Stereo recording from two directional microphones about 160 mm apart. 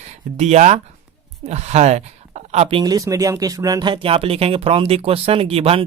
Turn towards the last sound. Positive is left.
turn(degrees=-35)  # may be behind; listen again after turning